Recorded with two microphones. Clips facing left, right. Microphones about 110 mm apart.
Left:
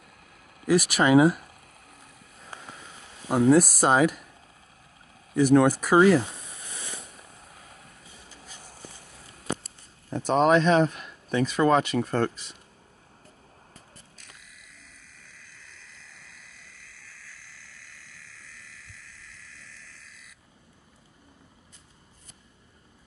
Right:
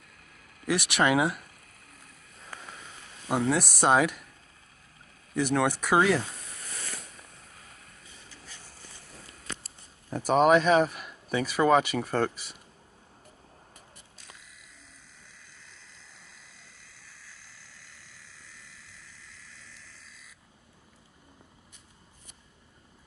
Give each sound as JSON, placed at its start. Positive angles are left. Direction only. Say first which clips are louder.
{"t": 0.7, "sound": "speech", "louder": "left 4 dB", "side_deg": 5}
{"t": 3.3, "sound": "speech", "louder": "left 7 dB", "side_deg": 10}
{"t": 5.3, "sound": "a sound", "louder": "left 7 dB", "side_deg": 5}
{"t": 10.0, "sound": "speech", "louder": "even", "side_deg": -5}
{"t": 15.5, "sound": "frog", "louder": "left 2 dB", "side_deg": -20}